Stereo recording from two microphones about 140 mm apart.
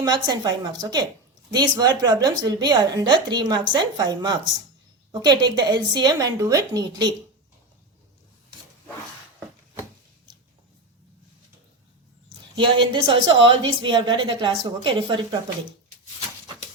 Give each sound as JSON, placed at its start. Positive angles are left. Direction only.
{"t": 0.0, "sound": "a woman's voice", "side_deg": -30}
{"t": 12.5, "sound": "a woman's voice", "side_deg": -35}